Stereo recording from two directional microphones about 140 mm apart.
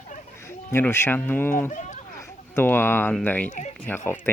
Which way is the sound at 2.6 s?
15° left (ahead or behind).